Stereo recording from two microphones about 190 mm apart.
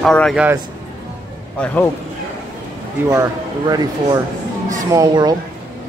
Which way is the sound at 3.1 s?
15° right (ahead or behind).